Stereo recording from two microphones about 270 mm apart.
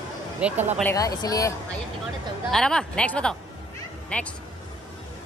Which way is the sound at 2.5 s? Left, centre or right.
Centre.